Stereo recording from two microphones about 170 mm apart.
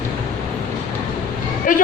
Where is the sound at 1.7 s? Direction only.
55° left (ahead or behind).